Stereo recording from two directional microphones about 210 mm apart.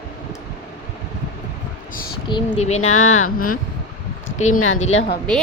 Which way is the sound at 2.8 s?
80° left.